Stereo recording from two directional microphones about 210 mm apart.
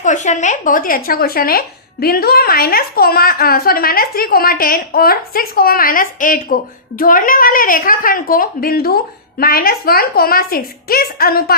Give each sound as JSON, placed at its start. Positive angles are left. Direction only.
{"t": 0.0, "sound": "a woman's voice", "side_deg": 35}